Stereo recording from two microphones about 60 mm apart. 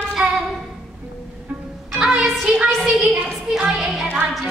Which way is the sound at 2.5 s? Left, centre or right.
Centre.